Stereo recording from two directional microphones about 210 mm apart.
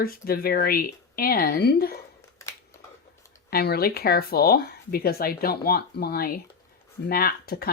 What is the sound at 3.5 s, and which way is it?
Speech, 50° left (ahead or behind).